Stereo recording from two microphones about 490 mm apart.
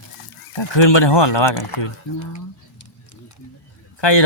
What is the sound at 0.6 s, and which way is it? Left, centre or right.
Speech, left.